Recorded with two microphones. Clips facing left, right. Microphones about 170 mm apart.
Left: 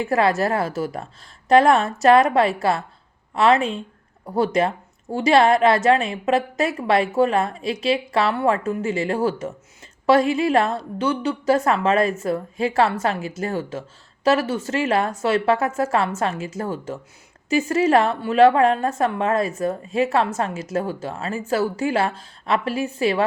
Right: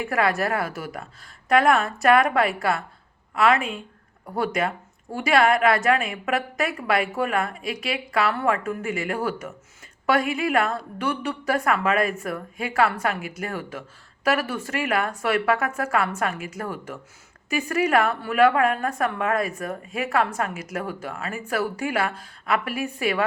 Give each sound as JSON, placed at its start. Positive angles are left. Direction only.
{"t": 0.0, "sound": "a woman's voice", "side_deg": 25}